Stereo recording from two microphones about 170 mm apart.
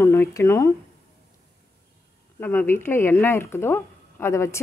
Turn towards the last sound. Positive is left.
turn(degrees=15)  # may be behind; listen again after turning